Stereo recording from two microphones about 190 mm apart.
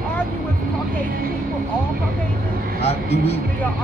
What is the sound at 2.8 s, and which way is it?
Speech, 35° left (ahead or behind).